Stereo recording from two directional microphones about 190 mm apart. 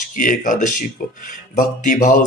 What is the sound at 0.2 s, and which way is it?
Speech, 45° left (ahead or behind).